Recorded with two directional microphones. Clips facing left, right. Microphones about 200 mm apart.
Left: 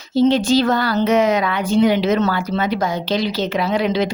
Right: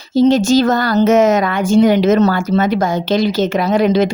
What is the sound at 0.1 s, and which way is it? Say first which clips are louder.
Speech: right 4 dB; 45° right (ahead or behind).